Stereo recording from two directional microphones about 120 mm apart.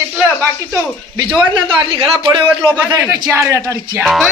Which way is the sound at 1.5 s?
45° right (ahead or behind).